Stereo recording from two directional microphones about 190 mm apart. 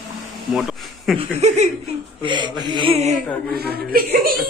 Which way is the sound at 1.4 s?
35° right (ahead or behind).